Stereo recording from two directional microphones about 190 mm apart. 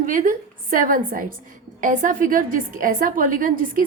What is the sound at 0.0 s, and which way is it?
A woman's voice, 45° right (ahead or behind).